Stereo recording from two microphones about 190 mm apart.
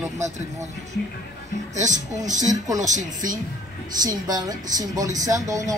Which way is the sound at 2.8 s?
40° right (ahead or behind).